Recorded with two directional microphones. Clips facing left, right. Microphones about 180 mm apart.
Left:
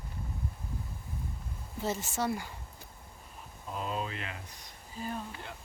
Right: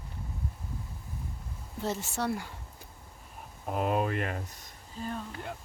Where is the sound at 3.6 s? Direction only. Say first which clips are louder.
Right 7 dB; 60° right (ahead or behind).